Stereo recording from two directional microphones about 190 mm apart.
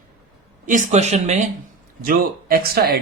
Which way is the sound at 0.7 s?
35° right (ahead or behind).